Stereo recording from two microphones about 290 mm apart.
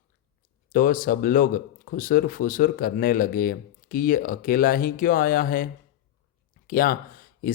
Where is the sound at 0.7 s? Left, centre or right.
Left.